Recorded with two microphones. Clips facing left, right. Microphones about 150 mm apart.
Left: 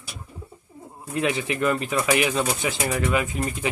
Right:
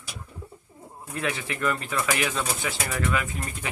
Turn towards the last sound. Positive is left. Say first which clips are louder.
# left 5 dB
turn(degrees=20)  # may be behind; listen again after turning